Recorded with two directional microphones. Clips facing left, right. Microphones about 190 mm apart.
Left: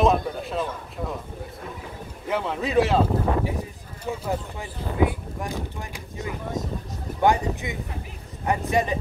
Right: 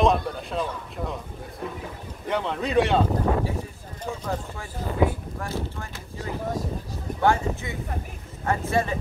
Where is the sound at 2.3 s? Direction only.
5° left (ahead or behind).